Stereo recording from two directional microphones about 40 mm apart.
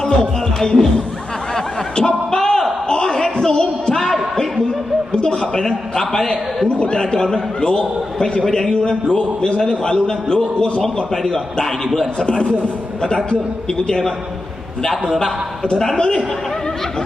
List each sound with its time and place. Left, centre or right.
0.0 s speech: centre
1.5 s snicker: centre
2.4 s a sound: centre
5.5 s a man's voice: centre
6.7 s a man's voice: left
10.8 s a man's voice: centre
12.2 s a man's voice: left
16.0 s a man's voice: left